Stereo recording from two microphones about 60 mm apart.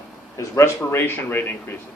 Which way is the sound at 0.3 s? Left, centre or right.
Left.